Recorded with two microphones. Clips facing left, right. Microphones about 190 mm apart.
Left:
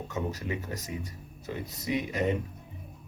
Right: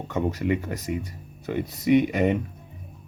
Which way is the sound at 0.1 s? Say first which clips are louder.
Right 10 dB; 65° right (ahead or behind).